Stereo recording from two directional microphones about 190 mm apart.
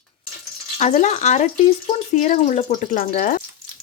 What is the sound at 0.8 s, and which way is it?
Speech, 40° left (ahead or behind).